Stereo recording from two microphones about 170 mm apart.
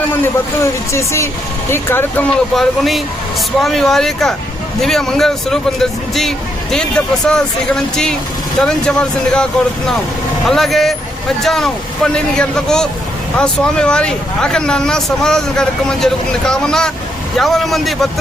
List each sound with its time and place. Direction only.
0.6 s speech: 15° left (ahead or behind)
2.6 s speech: centre (ahead or behind)